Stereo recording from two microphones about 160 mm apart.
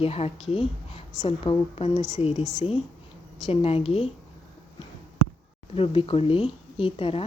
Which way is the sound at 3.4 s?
40° left (ahead or behind).